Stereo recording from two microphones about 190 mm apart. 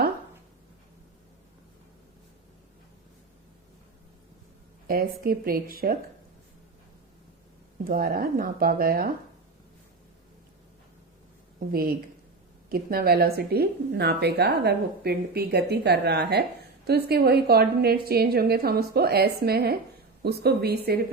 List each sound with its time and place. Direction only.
4.9 s speech: 50° right (ahead or behind)
7.9 s speech: 50° right (ahead or behind)
11.7 s speech: 50° right (ahead or behind)